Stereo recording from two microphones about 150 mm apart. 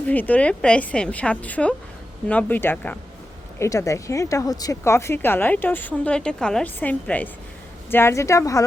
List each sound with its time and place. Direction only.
0.1 s speech: 10° left (ahead or behind)